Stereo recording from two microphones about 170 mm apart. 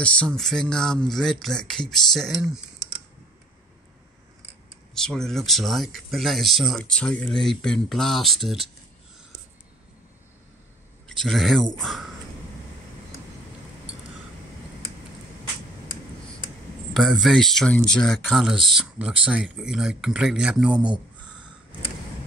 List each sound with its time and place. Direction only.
0.0 s speech: 5° left (ahead or behind)
4.9 s speech: 5° left (ahead or behind)
11.1 s speech: centre (ahead or behind)
16.9 s speech: centre (ahead or behind)
20.8 s a sound: 25° right (ahead or behind)